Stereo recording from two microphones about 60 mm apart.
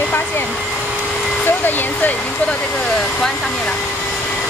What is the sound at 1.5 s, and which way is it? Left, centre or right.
Speech, left.